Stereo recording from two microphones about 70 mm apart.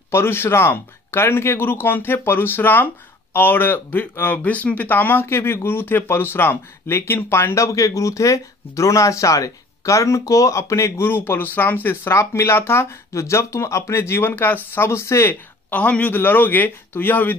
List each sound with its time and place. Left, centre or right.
0.1 s speech: left
11.1 s speech: left
15.7 s a man's voice: left